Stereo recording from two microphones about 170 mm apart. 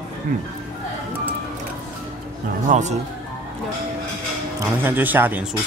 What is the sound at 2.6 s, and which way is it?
Speech, 45° right (ahead or behind).